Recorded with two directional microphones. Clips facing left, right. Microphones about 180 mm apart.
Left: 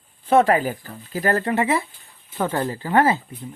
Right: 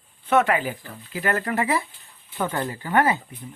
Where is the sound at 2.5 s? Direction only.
35° left (ahead or behind).